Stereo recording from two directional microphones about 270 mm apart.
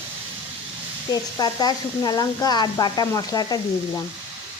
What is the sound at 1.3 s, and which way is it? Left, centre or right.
Speech, centre.